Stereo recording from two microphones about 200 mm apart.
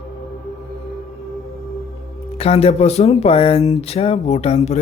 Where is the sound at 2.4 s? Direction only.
30° left (ahead or behind).